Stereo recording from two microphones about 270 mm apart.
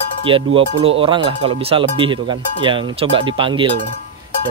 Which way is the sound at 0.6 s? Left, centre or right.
Centre.